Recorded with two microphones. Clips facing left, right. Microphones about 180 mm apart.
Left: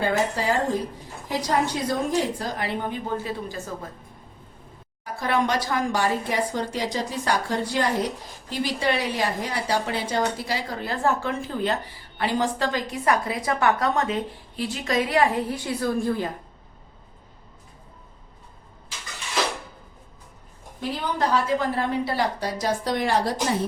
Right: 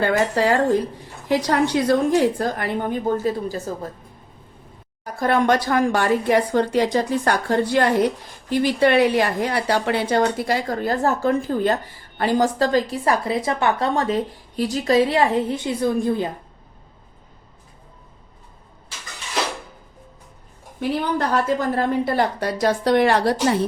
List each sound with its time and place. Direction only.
0.0 s speech: 70° right (ahead or behind); by 3.6 s 40° right (ahead or behind)
5.0 s a woman's voice: 50° right (ahead or behind); by 16.3 s 20° right (ahead or behind)
21.0 s speech: 55° right (ahead or behind)